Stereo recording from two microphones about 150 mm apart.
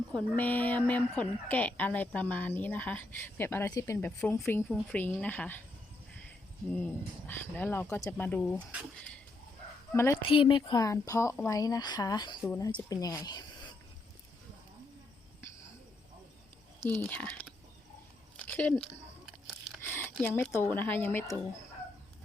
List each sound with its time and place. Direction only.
0.1 s speech: 10° left (ahead or behind)
6.7 s speech: 10° left (ahead or behind)
9.9 s speech: 15° left (ahead or behind)
10.2 s a woman's voice: 35° left (ahead or behind)
17.0 s speech: 10° left (ahead or behind)
18.3 s a sound: 10° left (ahead or behind)
20.2 s speech: 10° left (ahead or behind)